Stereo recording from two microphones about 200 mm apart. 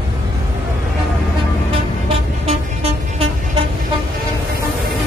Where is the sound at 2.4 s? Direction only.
30° right (ahead or behind).